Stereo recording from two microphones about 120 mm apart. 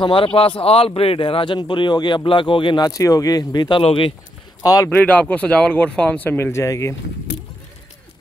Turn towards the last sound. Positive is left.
turn(degrees=25)  # may be behind; listen again after turning